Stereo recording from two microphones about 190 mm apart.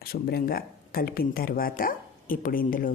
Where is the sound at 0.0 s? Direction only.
55° left (ahead or behind).